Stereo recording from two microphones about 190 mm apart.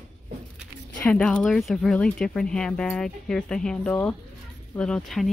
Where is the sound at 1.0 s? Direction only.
5° left (ahead or behind).